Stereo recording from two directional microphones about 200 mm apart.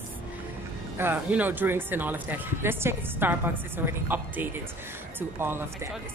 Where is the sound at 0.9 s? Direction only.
10° right (ahead or behind).